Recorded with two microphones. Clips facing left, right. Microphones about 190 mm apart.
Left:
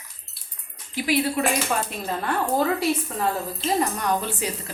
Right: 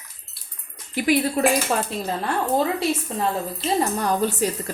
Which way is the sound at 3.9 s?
35° right (ahead or behind).